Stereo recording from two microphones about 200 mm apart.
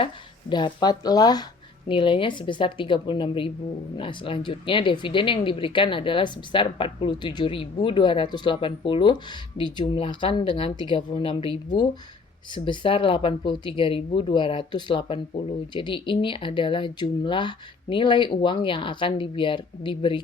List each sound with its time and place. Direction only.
0.5 s speech: 20° left (ahead or behind)